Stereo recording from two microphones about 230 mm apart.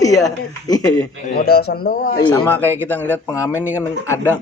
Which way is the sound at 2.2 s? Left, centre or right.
Centre.